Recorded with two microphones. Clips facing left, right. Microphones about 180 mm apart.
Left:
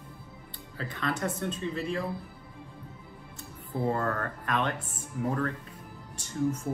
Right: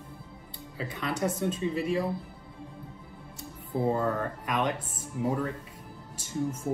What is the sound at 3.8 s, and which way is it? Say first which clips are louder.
Speech: right 2 dB; 10° right (ahead or behind).